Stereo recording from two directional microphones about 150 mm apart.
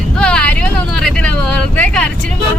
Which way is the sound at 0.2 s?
5° left (ahead or behind).